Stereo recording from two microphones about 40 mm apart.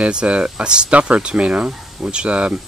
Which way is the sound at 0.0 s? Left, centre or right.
Right.